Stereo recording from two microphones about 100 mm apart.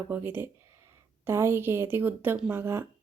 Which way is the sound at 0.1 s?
20° right (ahead or behind).